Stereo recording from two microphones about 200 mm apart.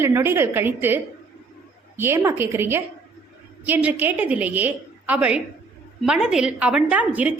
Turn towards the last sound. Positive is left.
turn(degrees=-5)  # may be behind; listen again after turning